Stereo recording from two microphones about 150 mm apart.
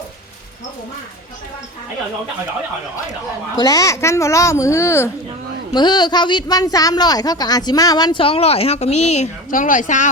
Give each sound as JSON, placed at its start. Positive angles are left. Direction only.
{"t": 3.6, "sound": "speech", "side_deg": 25}
{"t": 5.7, "sound": "speech", "side_deg": 30}